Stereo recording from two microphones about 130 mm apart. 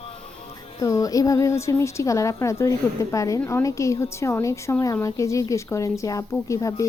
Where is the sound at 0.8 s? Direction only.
25° left (ahead or behind).